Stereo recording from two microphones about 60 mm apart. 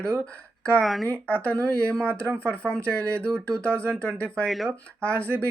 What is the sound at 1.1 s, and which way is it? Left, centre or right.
Speech, left.